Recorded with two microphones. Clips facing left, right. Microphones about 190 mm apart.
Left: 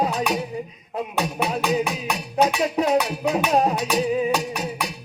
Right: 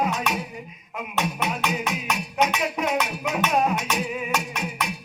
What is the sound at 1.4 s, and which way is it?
Music, 35° left (ahead or behind).